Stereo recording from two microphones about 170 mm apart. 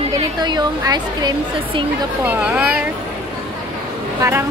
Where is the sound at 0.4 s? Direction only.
25° right (ahead or behind).